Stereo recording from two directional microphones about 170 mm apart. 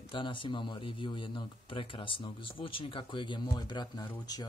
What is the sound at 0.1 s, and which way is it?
A man's voice, 30° left (ahead or behind).